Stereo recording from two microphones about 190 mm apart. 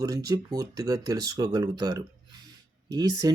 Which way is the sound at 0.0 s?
20° right (ahead or behind).